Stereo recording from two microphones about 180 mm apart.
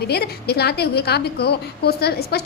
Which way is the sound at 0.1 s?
65° left (ahead or behind).